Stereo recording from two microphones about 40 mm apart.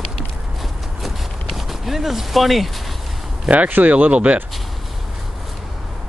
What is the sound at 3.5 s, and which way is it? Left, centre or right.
Speech, centre.